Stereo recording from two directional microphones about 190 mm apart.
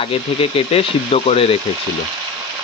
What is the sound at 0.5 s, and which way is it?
Speech, 30° left (ahead or behind).